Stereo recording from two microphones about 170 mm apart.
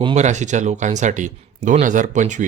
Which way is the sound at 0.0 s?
40° right (ahead or behind).